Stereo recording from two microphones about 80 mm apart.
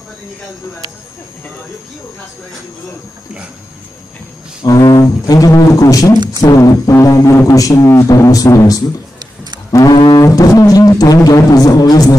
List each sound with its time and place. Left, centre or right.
4.6 s a man's voice: left
6.1 s speech: right
6.4 s a man's voice: left
9.7 s music: left
10.2 s music: left
10.7 s a man's voice: left